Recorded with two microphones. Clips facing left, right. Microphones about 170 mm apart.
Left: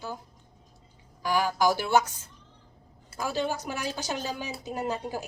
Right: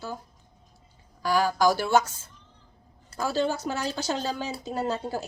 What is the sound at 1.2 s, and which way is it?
Speech, 15° left (ahead or behind).